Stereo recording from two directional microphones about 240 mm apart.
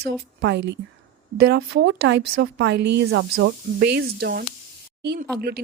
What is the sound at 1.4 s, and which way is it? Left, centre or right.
A woman's voice, right.